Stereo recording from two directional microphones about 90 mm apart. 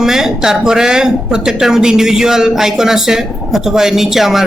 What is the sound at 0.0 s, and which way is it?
Speech, 5° right (ahead or behind).